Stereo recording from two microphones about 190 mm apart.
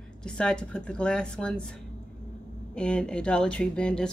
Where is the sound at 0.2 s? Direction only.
5° left (ahead or behind).